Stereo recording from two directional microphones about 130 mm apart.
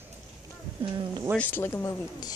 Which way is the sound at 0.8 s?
40° right (ahead or behind).